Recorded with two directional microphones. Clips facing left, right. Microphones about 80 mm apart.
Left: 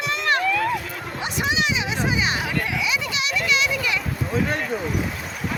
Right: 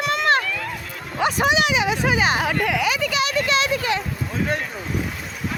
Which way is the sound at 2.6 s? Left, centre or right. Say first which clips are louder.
Right 4 dB; right.